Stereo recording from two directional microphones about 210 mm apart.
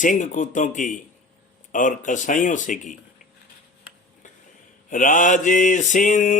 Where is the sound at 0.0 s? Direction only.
40° left (ahead or behind).